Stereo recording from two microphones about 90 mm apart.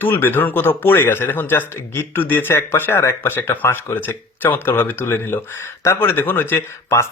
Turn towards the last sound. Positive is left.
turn(degrees=30)  # may be behind; listen again after turning